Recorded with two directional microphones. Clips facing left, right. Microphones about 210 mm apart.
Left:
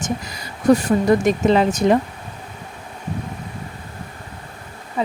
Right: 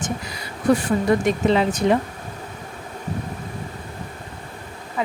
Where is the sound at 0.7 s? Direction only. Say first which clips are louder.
Left 3 dB; 40° left (ahead or behind).